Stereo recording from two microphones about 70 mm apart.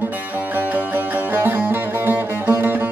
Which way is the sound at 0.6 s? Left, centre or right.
Right.